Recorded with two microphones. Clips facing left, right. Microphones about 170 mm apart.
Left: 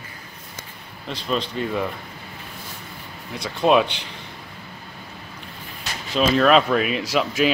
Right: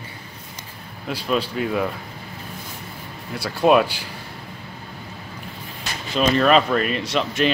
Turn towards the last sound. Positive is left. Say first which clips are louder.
# left 1 dB
turn(degrees=5)  # may be behind; listen again after turning